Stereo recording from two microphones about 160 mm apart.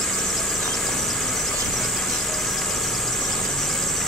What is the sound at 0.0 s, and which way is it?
Squeal, centre (ahead or behind).